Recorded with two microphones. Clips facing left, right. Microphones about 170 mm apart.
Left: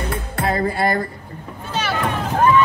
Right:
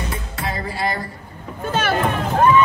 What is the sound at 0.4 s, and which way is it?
Music, 55° left (ahead or behind).